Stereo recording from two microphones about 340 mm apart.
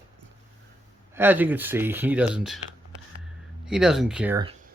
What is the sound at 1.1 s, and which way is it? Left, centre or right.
Speech, centre.